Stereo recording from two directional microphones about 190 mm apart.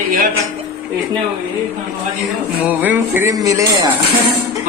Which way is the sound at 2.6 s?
10° right (ahead or behind).